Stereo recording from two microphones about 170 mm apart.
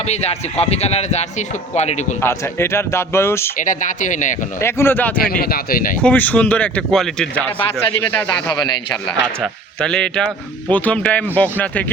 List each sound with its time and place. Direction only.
0.0 s a man's voice: 40° left (ahead or behind)
2.2 s speech: 15° left (ahead or behind)
3.6 s speech: 50° left (ahead or behind)
4.6 s speech: 15° left (ahead or behind)
5.1 s speech: 60° left (ahead or behind)
6.0 s speech: 10° left (ahead or behind)
8.4 s a man's voice: 25° left (ahead or behind)
9.4 s a man's voice: 5° left (ahead or behind)